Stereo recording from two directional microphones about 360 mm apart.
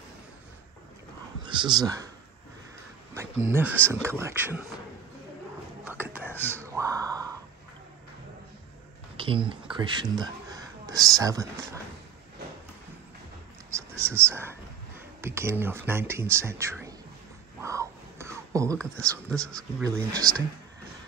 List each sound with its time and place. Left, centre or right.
1.4 s speech: centre
3.4 s speech: centre
5.9 s whispering: centre
6.6 s a sound: centre
9.1 s speech: centre
13.7 s a sound: centre
15.2 s speech: centre
17.6 s whispering: centre
18.8 s speech: centre
19.8 s speech: centre